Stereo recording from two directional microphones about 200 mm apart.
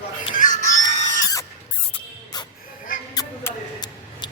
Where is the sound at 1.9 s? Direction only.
20° left (ahead or behind).